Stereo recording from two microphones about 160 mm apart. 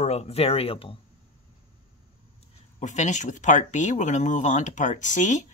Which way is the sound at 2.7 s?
50° left (ahead or behind).